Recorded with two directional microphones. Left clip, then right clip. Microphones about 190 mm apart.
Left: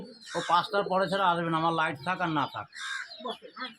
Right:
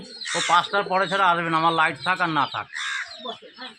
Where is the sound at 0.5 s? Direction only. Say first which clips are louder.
Right 5 dB; 25° right (ahead or behind).